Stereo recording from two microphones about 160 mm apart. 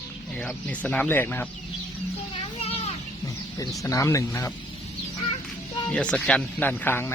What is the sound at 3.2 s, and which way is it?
Speech, 20° left (ahead or behind).